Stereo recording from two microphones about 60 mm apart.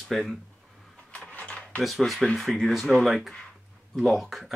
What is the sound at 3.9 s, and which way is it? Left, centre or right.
Speech, centre.